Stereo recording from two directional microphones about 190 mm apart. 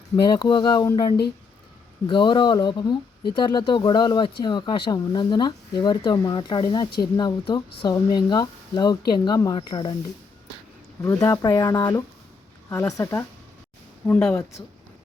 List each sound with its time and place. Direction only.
0.3 s speech: 20° left (ahead or behind)
11.0 s speech: 15° left (ahead or behind)